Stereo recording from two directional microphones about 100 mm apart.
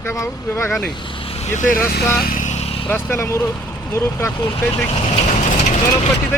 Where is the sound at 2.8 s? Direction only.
20° left (ahead or behind).